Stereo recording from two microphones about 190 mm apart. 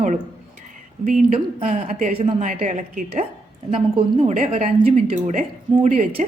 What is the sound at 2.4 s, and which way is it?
Speech, 40° right (ahead or behind).